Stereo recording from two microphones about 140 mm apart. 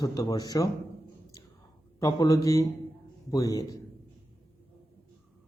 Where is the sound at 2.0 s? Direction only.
25° left (ahead or behind).